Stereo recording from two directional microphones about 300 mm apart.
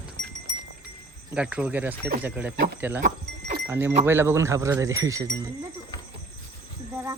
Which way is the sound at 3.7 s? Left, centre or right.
Centre.